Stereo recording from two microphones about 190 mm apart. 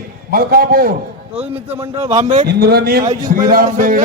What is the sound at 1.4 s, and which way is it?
Speech, 10° right (ahead or behind).